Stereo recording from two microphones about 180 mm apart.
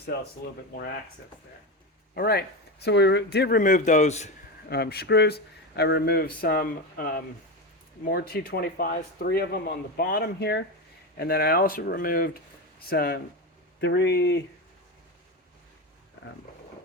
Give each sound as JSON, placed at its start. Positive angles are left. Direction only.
{"t": 0.1, "sound": "speech", "side_deg": 65}
{"t": 2.1, "sound": "speech", "side_deg": 60}
{"t": 2.8, "sound": "speech", "side_deg": 70}
{"t": 3.6, "sound": "a man's voice", "side_deg": 45}
{"t": 4.7, "sound": "speech", "side_deg": 60}
{"t": 13.8, "sound": "speech", "side_deg": 70}